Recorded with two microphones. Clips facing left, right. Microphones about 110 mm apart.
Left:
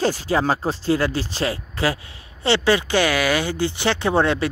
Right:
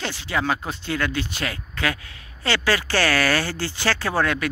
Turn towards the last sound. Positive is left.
turn(degrees=25)  # may be behind; listen again after turning